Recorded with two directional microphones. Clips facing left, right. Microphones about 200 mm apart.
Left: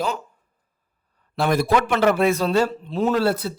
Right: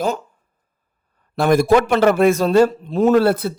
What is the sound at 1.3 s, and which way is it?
A man's voice, 45° right (ahead or behind).